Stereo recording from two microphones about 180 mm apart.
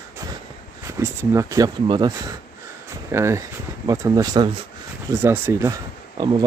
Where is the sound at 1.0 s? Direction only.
20° right (ahead or behind).